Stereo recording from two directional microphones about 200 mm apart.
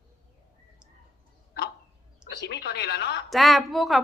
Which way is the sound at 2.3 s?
55° left (ahead or behind).